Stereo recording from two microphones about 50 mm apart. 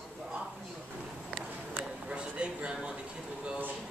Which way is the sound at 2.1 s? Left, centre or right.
Right.